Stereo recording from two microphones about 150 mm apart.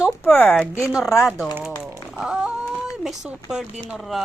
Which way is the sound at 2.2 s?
5° right (ahead or behind).